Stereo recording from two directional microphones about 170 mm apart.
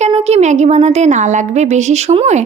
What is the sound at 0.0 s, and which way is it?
A woman's voice, 40° right (ahead or behind).